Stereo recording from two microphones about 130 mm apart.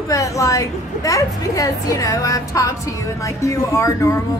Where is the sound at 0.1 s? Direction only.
25° left (ahead or behind).